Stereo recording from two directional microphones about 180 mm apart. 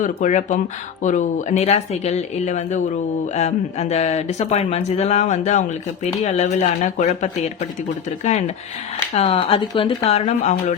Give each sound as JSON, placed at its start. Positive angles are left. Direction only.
{"t": 0.0, "sound": "speech", "side_deg": 40}